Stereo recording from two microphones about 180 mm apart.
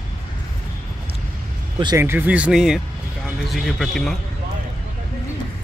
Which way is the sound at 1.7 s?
25° right (ahead or behind).